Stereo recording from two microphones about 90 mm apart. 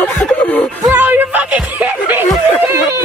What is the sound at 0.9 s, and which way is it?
Music, 20° right (ahead or behind).